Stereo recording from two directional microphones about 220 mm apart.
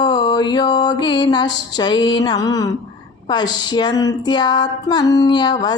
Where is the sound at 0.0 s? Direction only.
20° left (ahead or behind).